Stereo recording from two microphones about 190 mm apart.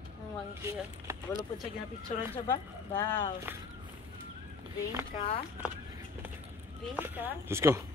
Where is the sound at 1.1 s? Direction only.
15° right (ahead or behind).